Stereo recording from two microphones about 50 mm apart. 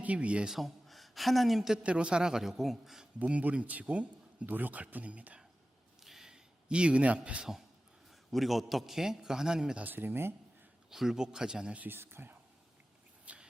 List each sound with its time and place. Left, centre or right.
0.0 s speech: right
0.4 s speech: centre
1.8 s a man's voice: right; by 3.1 s centre
3.2 s a man's voice: right
6.0 s a sound: centre; by 7.4 s right
8.3 s a man's voice: centre
9.8 s speech: right
10.9 s a man's voice: centre
11.9 s speech: right
13.3 s shuffle: right